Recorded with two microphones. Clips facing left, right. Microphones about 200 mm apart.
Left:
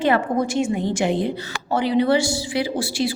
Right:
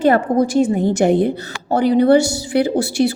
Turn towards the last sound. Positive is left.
turn(degrees=-55)  # may be behind; listen again after turning